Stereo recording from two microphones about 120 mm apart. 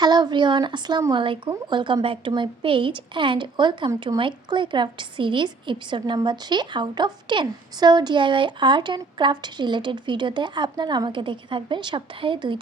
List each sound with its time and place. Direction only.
0.0 s a woman's voice: 35° right (ahead or behind)